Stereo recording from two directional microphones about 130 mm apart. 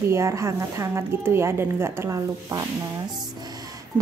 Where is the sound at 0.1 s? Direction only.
20° right (ahead or behind).